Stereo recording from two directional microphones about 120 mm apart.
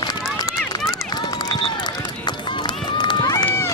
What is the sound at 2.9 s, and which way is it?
Run, 35° left (ahead or behind).